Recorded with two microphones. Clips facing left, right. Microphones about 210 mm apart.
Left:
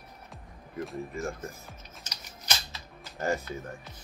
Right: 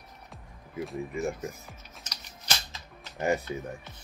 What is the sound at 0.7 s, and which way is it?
Speech, centre (ahead or behind).